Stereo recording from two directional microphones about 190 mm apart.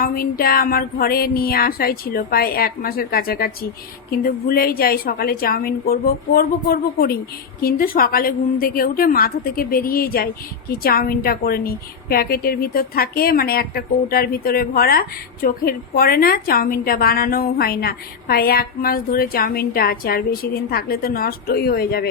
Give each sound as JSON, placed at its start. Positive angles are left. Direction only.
{"t": 0.0, "sound": "a woman's voice", "side_deg": 50}